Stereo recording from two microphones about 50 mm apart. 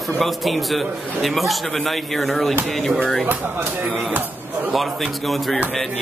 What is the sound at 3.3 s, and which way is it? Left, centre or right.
Speech, right.